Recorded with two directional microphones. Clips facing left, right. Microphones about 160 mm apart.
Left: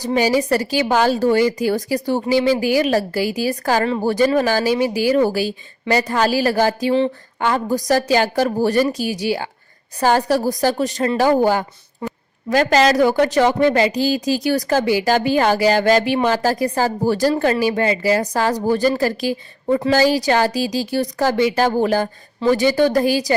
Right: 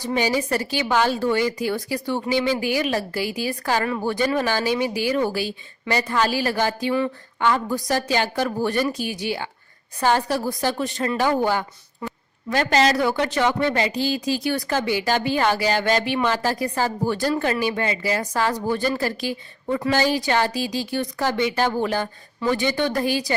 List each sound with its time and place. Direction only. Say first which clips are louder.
0.0 s a woman's voice: left 5 dB; 40° left (ahead or behind)